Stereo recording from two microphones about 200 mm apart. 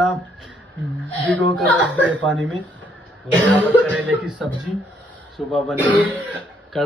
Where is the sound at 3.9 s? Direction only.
5° right (ahead or behind).